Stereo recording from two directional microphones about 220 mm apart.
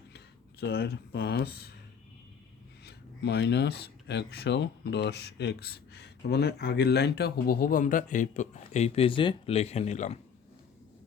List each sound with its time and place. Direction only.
0.6 s speech: 45° left (ahead or behind)
2.8 s speech: 50° left (ahead or behind); by 10.2 s 30° left (ahead or behind)